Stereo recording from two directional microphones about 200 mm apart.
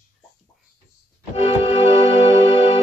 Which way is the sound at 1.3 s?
30° left (ahead or behind).